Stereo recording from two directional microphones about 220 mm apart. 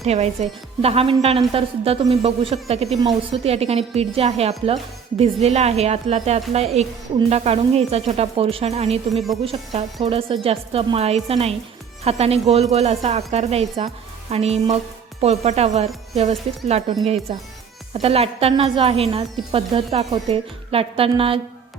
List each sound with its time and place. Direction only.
0.0 s a woman's voice: 30° right (ahead or behind)
17.9 s a woman's voice: 25° right (ahead or behind)